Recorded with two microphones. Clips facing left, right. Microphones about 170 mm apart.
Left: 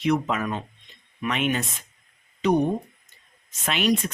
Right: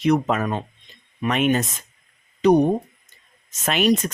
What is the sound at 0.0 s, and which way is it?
Speech, 40° right (ahead or behind).